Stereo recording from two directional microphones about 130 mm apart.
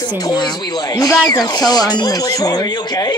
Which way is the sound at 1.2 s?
30° left (ahead or behind).